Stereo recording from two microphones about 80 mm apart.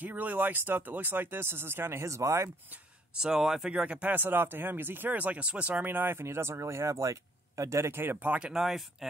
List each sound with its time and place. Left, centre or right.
0.0 s speech: right
3.2 s speech: centre